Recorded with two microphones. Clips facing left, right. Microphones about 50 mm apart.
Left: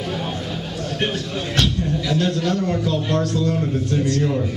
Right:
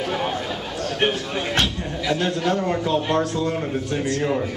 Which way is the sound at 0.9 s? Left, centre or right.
Right.